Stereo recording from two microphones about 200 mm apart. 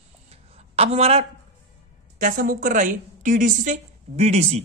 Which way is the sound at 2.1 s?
45° right (ahead or behind).